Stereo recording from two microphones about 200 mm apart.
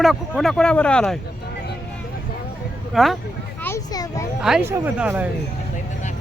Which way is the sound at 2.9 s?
Centre (ahead or behind).